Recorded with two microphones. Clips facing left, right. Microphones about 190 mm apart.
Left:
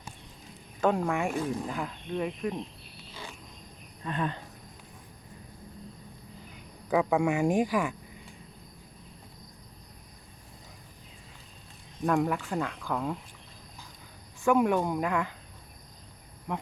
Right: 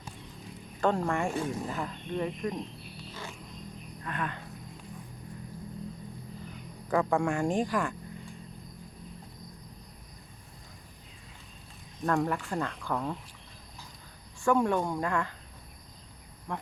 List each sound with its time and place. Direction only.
0.8 s speech: 5° left (ahead or behind)
4.0 s speech: 25° left (ahead or behind)
6.9 s speech: 5° left (ahead or behind)
12.0 s speech: 5° left (ahead or behind)
14.4 s speech: 15° left (ahead or behind)